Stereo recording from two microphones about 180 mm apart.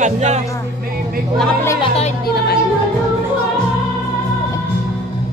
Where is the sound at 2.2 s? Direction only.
60° left (ahead or behind).